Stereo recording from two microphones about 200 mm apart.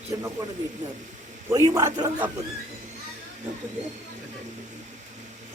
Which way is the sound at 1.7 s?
15° right (ahead or behind).